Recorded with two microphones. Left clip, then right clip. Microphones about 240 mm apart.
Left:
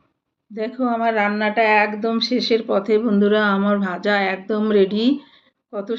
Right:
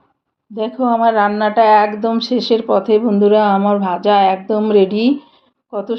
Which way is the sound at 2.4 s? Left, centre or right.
Right.